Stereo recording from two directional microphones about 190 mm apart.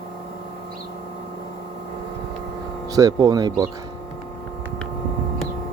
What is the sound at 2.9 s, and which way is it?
Speech, 20° right (ahead or behind).